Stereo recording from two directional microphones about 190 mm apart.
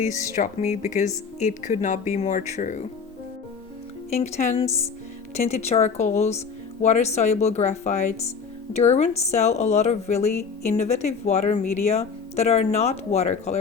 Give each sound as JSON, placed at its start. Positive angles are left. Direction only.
{"t": 0.0, "sound": "speech", "side_deg": 40}
{"t": 4.2, "sound": "speech", "side_deg": 35}